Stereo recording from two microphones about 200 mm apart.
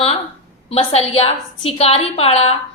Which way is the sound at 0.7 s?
30° left (ahead or behind).